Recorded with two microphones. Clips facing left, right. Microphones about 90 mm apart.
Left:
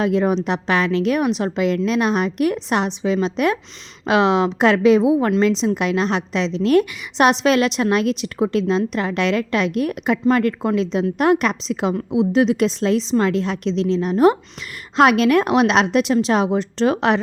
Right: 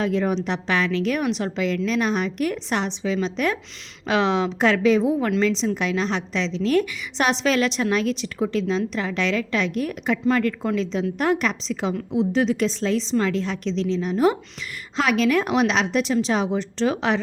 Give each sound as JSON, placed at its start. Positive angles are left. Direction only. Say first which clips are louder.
{"t": 0.0, "sound": "a woman's voice", "louder": "left 4 dB", "side_deg": 40}
{"t": 16.5, "sound": "a woman's voice", "louder": "left 4 dB", "side_deg": 50}